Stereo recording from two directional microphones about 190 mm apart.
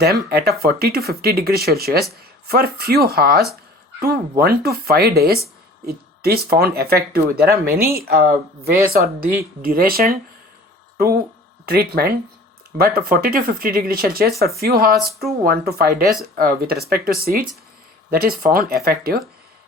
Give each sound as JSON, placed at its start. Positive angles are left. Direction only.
{"t": 0.0, "sound": "speech", "side_deg": -55}